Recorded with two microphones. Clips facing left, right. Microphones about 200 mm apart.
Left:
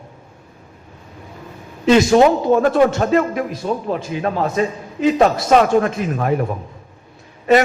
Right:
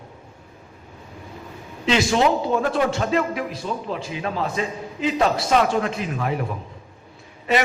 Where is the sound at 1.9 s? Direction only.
50° left (ahead or behind).